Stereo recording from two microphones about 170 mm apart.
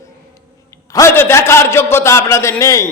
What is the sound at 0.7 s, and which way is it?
A man's voice, 20° left (ahead or behind).